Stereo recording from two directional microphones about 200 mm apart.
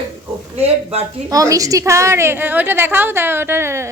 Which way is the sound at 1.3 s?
15° right (ahead or behind).